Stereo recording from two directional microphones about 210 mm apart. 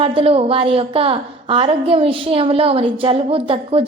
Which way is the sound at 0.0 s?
25° right (ahead or behind).